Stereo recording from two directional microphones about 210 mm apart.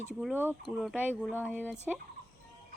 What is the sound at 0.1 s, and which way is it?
Speech, 5° right (ahead or behind).